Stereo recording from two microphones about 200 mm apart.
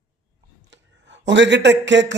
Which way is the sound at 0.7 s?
65° right (ahead or behind).